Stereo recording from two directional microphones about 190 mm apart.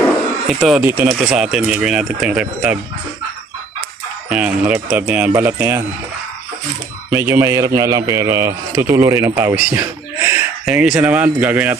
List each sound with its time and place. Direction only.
0.4 s speech: centre (ahead or behind)
4.3 s speech: 5° right (ahead or behind)
7.1 s speech: 15° right (ahead or behind)